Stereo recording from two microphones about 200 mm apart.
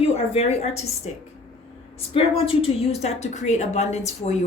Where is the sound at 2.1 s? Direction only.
25° left (ahead or behind).